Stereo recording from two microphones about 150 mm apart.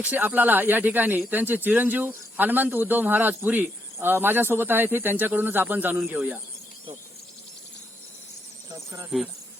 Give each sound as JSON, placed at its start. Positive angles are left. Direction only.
{"t": 0.0, "sound": "a man's voice", "side_deg": -10}
{"t": 8.7, "sound": "speech", "side_deg": -20}